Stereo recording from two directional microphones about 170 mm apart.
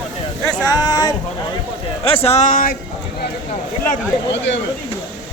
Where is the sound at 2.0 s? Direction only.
35° left (ahead or behind); by 2.7 s 50° left (ahead or behind).